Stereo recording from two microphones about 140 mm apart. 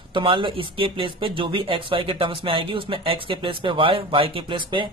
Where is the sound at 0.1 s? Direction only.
35° right (ahead or behind).